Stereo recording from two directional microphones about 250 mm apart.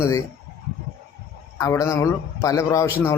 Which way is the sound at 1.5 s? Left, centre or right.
Centre.